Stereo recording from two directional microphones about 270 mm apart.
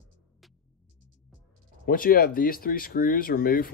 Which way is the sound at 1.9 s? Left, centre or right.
Left.